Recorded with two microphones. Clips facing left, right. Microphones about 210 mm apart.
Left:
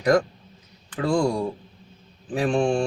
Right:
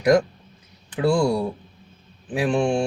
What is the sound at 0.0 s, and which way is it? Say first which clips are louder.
Speech: right 2 dB; 10° right (ahead or behind).